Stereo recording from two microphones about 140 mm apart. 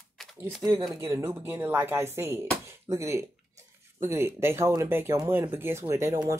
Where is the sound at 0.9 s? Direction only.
20° right (ahead or behind).